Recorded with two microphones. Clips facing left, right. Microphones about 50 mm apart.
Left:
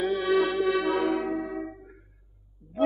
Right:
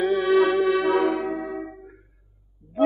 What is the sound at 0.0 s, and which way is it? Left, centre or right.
Music, centre.